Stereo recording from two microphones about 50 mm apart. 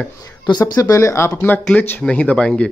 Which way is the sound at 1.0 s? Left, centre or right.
Left.